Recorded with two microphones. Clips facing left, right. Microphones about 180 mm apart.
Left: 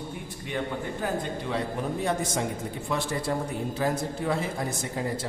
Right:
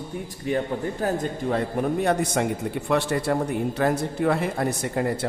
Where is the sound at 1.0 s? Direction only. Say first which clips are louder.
Right 5 dB; 45° right (ahead or behind).